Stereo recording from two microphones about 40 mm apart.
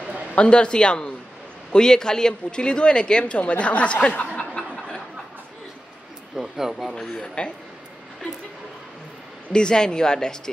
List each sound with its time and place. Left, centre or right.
0.4 s speech: left
6.3 s speech: centre
7.4 s speech: left
9.5 s speech: left